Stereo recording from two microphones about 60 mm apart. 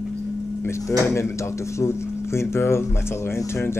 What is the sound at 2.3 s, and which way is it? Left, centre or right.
Speech, left.